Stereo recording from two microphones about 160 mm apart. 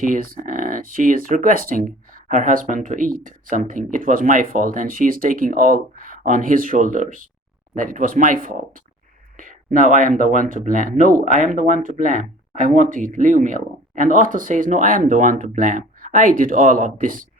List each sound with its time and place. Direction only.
0.0 s speech: 60° right (ahead or behind)